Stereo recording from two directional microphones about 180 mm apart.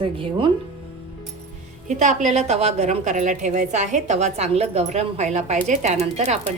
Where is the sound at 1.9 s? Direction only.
40° right (ahead or behind).